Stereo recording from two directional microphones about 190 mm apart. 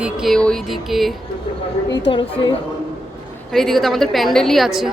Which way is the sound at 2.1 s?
25° left (ahead or behind).